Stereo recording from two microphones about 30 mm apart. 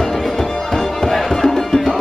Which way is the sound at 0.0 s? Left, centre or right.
Centre.